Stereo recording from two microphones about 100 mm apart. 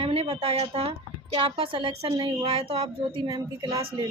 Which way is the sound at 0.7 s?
80° right.